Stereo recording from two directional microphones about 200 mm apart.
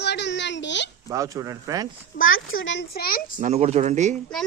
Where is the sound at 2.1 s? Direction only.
85° left; by 3.3 s 50° left (ahead or behind).